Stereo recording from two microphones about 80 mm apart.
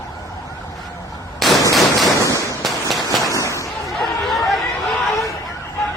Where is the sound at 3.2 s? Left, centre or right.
Left.